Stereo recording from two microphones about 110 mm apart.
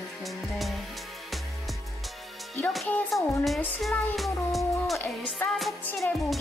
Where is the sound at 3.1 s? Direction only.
Centre (ahead or behind).